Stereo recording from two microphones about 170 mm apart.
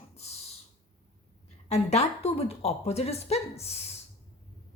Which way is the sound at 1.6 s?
40° left (ahead or behind).